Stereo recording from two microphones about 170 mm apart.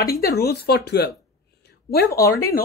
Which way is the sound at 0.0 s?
65° left (ahead or behind).